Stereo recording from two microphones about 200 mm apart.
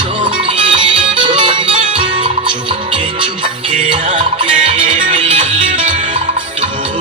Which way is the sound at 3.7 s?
25° right (ahead or behind).